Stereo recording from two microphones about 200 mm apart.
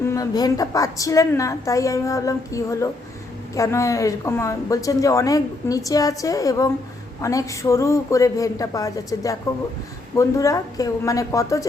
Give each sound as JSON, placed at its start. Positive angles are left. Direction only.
{"t": 0.0, "sound": "speech", "side_deg": 15}